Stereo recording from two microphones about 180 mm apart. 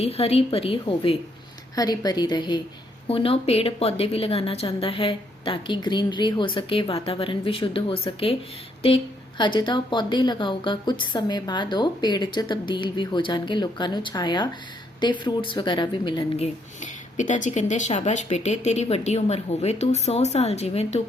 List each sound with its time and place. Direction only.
0.0 s a woman's voice: 35° left (ahead or behind)
9.4 s a woman's voice: 25° left (ahead or behind)
16.4 s a woman's voice: 45° left (ahead or behind)